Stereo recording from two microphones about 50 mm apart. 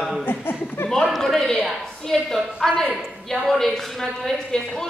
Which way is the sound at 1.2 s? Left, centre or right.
Centre.